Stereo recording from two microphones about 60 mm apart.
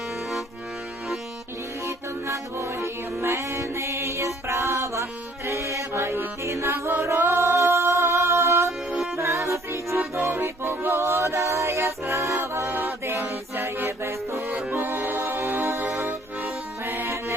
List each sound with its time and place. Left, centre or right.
2.2 s music: right
5.5 s mantra: right
7.2 s music: right
10.2 s music: right
12.6 s music: right
14.4 s music: right
16.0 s accordion: right